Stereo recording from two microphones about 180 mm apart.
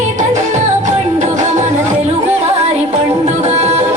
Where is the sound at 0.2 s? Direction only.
40° right (ahead or behind).